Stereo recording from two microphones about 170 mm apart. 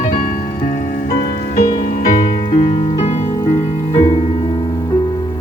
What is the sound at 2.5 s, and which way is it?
Music, 35° left (ahead or behind).